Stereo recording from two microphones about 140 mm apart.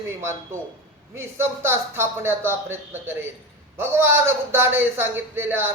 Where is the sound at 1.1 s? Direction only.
15° right (ahead or behind).